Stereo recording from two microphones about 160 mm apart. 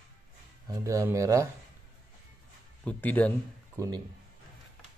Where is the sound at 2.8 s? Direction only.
10° left (ahead or behind).